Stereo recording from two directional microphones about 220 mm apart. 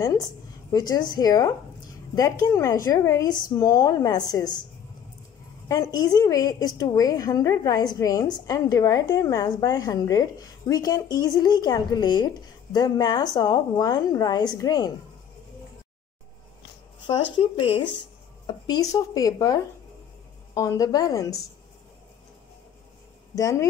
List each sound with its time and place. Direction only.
0.7 s a woman's voice: 15° left (ahead or behind)
5.9 s a woman's voice: 15° left (ahead or behind)
17.4 s a woman's voice: 25° left (ahead or behind)
23.3 s a woman's voice: 15° left (ahead or behind)